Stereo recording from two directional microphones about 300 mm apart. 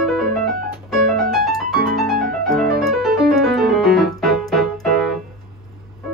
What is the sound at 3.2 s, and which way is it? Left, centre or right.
Keyboard, centre.